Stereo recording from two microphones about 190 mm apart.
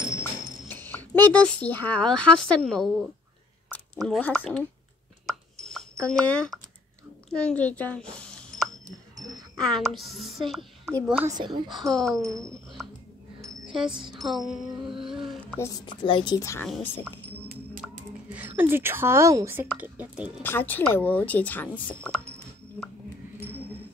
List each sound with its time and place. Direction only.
0.1 s speech: 10° left (ahead or behind)
3.6 s a sound: 5° left (ahead or behind)
4.1 s speech: 5° left (ahead or behind)
5.2 s chopping: centre (ahead or behind)
6.0 s a woman's voice: 5° left (ahead or behind)
11.3 s a woman's voice: 25° right (ahead or behind)
11.8 s speech: centre (ahead or behind)
13.4 s music: 25° right (ahead or behind)
14.2 s music: centre (ahead or behind)
15.2 s a sound: 10° left (ahead or behind)
15.8 s a woman's voice: 25° left (ahead or behind)
17.7 s a sound: 5° right (ahead or behind)
18.6 s speech: 10° right (ahead or behind)
20.4 s a woman's voice: 10° left (ahead or behind)